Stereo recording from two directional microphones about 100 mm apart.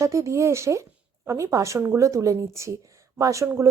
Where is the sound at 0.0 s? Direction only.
30° right (ahead or behind).